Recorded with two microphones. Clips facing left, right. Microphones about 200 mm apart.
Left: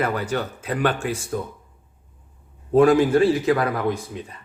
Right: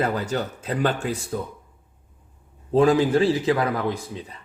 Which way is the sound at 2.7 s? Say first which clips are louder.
Left 2 dB; 25° right (ahead or behind).